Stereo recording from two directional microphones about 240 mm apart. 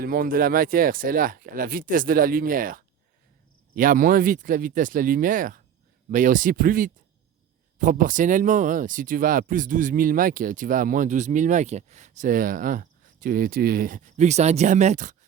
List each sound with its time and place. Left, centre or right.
0.0 s speech: right